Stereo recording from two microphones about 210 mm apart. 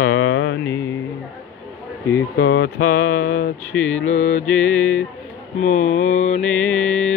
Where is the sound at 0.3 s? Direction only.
60° left (ahead or behind).